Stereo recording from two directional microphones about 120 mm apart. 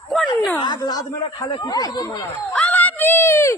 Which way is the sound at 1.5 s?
35° left (ahead or behind).